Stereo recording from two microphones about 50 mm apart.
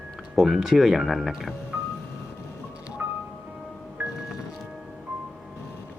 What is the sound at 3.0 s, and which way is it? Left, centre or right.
Music, right.